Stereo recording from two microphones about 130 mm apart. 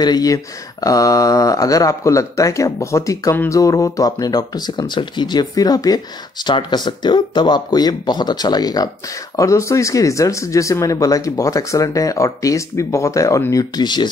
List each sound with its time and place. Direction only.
0.0 s speech: 30° left (ahead or behind)